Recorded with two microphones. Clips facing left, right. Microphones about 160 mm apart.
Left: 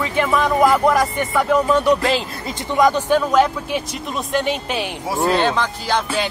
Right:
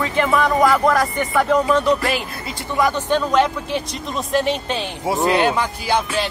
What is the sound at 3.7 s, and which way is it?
Music, centre (ahead or behind).